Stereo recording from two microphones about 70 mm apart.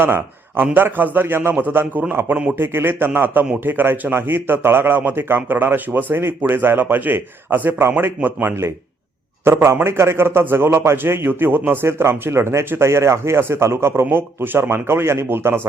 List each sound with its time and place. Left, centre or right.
0.0 s a man's voice: right